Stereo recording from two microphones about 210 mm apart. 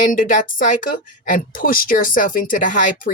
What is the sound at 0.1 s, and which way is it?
Speech, 40° left (ahead or behind).